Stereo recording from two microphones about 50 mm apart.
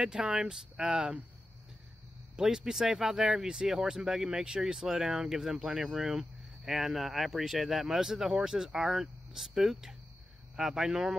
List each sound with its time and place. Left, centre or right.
0.0 s speech: centre
2.3 s speech: centre
4.6 s speech: centre
5.1 s speech: centre